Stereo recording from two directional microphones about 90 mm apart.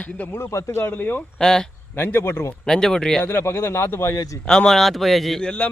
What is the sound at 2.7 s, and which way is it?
Speech, 5° left (ahead or behind).